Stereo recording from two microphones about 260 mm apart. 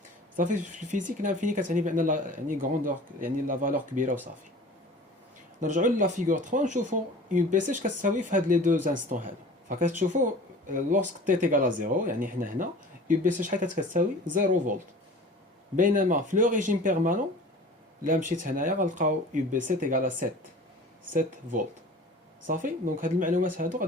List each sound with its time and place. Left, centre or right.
0.3 s speech: right
5.5 s speech: right
18.3 s speech: right